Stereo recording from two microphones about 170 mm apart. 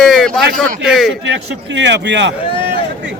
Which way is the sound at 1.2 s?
90° right.